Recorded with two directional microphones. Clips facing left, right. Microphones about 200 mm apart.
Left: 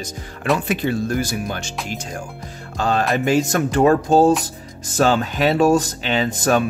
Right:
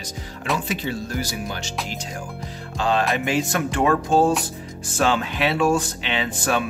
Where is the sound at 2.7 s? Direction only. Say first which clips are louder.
Left 2 dB; 45° left (ahead or behind).